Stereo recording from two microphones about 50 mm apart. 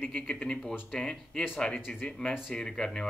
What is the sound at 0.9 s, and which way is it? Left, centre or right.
Speech, centre.